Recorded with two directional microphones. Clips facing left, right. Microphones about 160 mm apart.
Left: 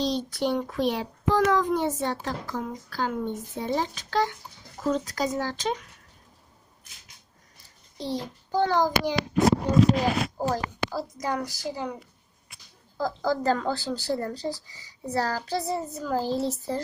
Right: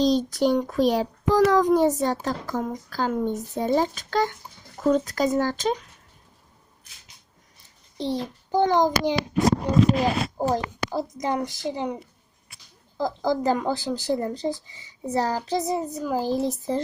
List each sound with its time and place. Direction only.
0.0 s a child's voice: 45° right (ahead or behind)
7.9 s a woman's voice: 20° right (ahead or behind)
10.2 s a woman's voice: 20° right (ahead or behind)